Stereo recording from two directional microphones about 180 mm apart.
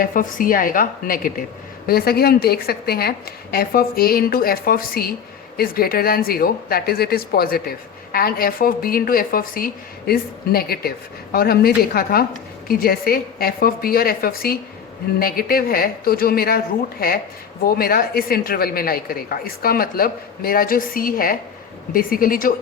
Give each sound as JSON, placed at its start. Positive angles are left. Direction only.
{"t": 0.0, "sound": "a woman's voice", "side_deg": 50}
{"t": 17.7, "sound": "a woman's voice", "side_deg": 55}